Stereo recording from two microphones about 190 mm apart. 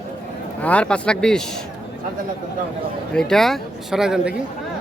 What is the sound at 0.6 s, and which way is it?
Speech, 5° left (ahead or behind).